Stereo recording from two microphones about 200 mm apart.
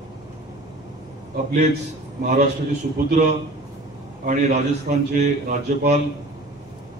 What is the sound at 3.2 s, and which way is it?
Speech, 35° right (ahead or behind).